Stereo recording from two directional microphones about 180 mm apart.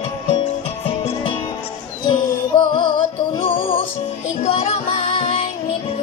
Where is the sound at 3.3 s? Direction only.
30° left (ahead or behind).